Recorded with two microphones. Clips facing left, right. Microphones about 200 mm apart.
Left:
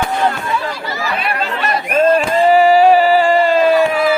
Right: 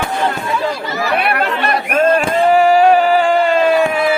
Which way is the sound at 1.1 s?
65° right (ahead or behind).